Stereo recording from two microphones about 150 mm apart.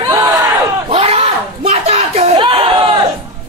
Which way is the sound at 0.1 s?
20° right (ahead or behind).